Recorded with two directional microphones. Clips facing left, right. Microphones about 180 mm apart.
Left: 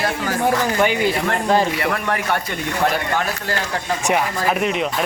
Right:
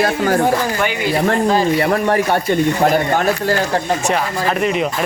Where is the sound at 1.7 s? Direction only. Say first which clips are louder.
Right 7 dB; 30° right (ahead or behind).